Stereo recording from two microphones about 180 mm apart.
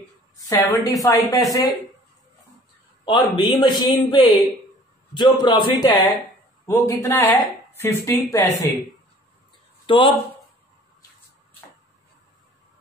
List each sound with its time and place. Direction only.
0.5 s a man's voice: 20° left (ahead or behind)
3.1 s a man's voice: 25° left (ahead or behind)
9.8 s speech: 30° left (ahead or behind)